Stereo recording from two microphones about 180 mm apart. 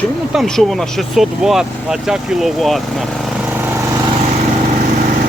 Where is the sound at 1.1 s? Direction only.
Centre (ahead or behind).